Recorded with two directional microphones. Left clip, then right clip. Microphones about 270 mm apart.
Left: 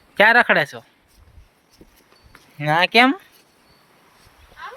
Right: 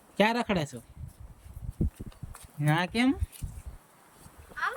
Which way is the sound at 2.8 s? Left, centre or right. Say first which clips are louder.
Left 18 dB; left.